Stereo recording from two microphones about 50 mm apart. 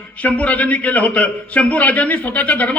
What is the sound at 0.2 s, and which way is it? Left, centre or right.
A man's voice, left.